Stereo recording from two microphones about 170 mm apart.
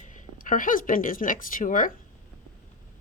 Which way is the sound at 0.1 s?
50° left (ahead or behind).